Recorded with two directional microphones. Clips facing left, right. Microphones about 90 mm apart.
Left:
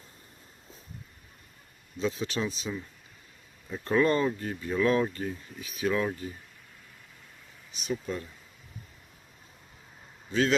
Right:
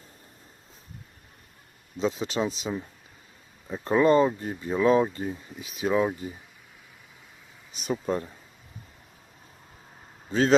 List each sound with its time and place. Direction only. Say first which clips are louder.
2.0 s speech: right 3 dB; 25° right (ahead or behind)
5.6 s speech: right 4 dB; 25° right (ahead or behind)
7.8 s speech: right 5 dB; 40° right (ahead or behind)